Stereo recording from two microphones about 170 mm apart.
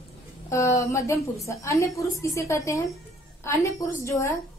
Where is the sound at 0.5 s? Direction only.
15° left (ahead or behind).